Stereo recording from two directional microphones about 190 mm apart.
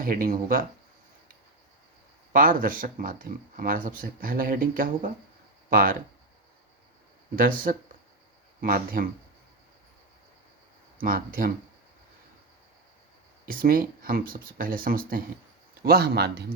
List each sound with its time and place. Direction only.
0.0 s speech: 50° right (ahead or behind)
2.3 s speech: 45° right (ahead or behind)
7.3 s speech: 45° right (ahead or behind)
11.0 s speech: 50° right (ahead or behind)
13.5 s speech: 50° right (ahead or behind)